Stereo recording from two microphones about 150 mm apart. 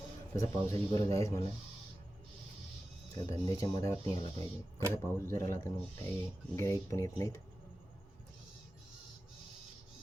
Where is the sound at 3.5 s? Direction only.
20° left (ahead or behind).